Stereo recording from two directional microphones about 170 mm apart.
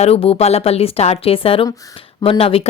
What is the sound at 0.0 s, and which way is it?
A woman's voice, 35° left (ahead or behind).